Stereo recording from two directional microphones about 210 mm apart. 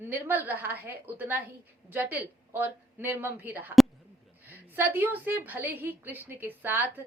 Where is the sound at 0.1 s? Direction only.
10° right (ahead or behind).